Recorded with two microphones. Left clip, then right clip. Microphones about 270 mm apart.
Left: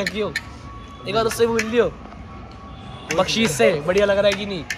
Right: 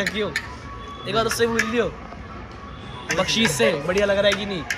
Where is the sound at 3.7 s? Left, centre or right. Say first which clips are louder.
Left 3 dB; centre.